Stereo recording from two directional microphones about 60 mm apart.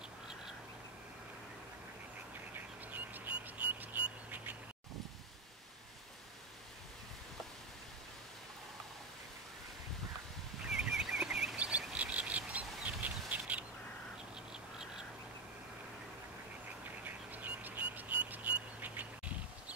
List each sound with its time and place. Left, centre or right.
2.5 s duck: right
10.7 s a sound: centre
11.5 s bird: right
11.9 s insect: right
16.9 s bird: right